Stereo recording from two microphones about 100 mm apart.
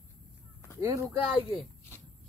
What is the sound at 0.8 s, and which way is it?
Speech, 35° right (ahead or behind).